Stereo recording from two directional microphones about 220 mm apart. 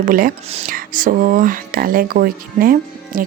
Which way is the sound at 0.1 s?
40° right (ahead or behind).